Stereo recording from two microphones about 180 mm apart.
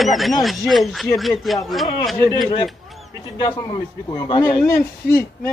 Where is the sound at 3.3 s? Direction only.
25° left (ahead or behind).